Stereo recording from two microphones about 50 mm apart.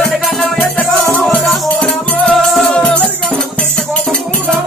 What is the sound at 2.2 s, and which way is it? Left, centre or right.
Music, centre.